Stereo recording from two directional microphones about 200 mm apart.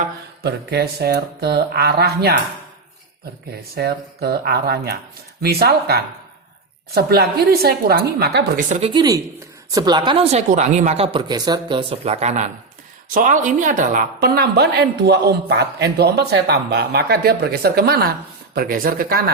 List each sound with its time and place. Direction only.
0.0 s a woman's voice: 55° right (ahead or behind)
3.8 s a woman's voice: 50° right (ahead or behind)
8.7 s a woman's voice: 25° right (ahead or behind); by 19.2 s 45° right (ahead or behind)